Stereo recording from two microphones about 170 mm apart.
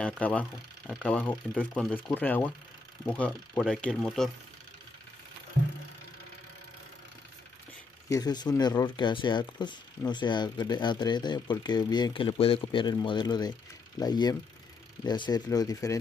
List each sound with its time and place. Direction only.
0.0 s speech: 10° left (ahead or behind)
8.1 s speech: 25° left (ahead or behind)